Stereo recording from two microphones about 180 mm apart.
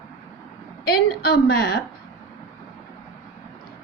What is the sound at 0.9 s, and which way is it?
Speech, 60° left (ahead or behind).